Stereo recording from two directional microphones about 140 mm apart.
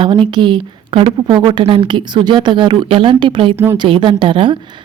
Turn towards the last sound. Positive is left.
turn(degrees=-35)  # may be behind; listen again after turning